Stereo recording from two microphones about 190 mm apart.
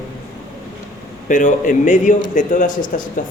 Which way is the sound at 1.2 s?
45° left (ahead or behind).